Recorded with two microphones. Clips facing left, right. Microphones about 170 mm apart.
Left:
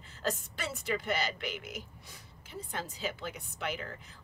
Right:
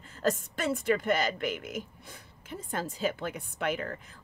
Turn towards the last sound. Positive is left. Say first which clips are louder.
# right 6 dB
turn(degrees=-55)  # may be behind; listen again after turning